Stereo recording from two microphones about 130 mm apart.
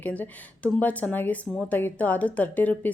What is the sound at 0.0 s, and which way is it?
Speech, 10° left (ahead or behind).